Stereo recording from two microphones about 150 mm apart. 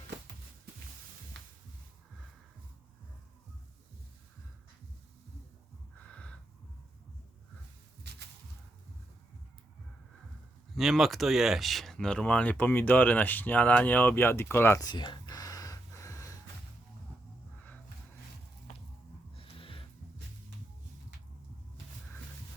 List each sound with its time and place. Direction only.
6.1 s a sound: 10° left (ahead or behind)
10.8 s speech: centre (ahead or behind); by 16.3 s 20° left (ahead or behind)
19.4 s music: 35° left (ahead or behind)